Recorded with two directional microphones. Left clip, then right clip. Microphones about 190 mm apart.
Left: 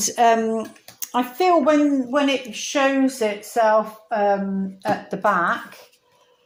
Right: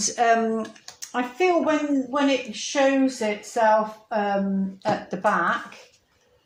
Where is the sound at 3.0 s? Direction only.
40° left (ahead or behind).